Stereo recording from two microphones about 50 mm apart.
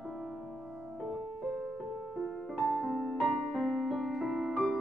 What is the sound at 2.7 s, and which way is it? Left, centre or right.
Music, centre.